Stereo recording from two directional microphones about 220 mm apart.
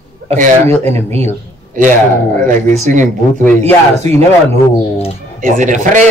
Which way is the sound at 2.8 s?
35° right (ahead or behind).